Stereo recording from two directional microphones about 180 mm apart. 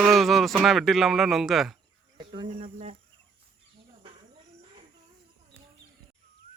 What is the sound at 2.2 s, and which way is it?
Speech, 25° right (ahead or behind).